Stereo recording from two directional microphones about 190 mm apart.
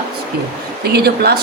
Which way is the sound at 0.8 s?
55° right (ahead or behind).